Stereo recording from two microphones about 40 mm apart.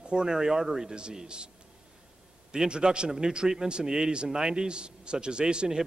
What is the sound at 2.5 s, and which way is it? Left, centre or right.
A man's voice, centre.